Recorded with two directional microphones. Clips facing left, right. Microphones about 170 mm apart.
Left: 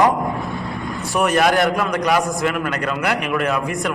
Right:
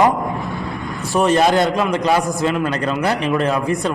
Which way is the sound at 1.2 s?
25° right (ahead or behind).